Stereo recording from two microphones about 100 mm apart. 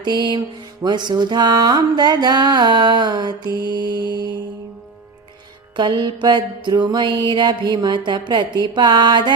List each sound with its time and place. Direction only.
0.0 s music: 45° right (ahead or behind)
5.7 s music: 50° right (ahead or behind)